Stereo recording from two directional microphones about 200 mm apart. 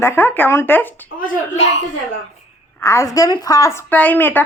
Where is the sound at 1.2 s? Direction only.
35° left (ahead or behind).